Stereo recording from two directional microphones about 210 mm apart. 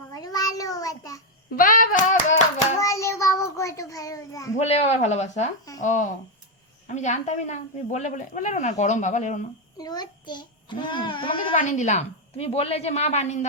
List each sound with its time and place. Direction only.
0.1 s child singing: 20° left (ahead or behind)
1.5 s speech: 40° left (ahead or behind)
2.7 s child singing: 15° left (ahead or behind)
4.5 s speech: 30° left (ahead or behind)
9.7 s a child's voice: 20° left (ahead or behind)
11.5 s speech: 35° left (ahead or behind)